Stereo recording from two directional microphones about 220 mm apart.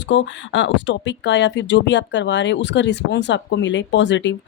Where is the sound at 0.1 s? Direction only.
55° left (ahead or behind).